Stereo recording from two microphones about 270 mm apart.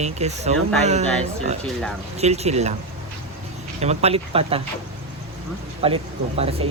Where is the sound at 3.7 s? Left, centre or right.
Right.